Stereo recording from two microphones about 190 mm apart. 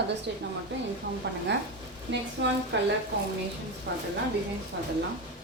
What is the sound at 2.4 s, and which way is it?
Speech, 70° right (ahead or behind).